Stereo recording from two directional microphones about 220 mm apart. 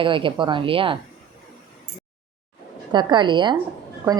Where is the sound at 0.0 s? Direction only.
20° right (ahead or behind).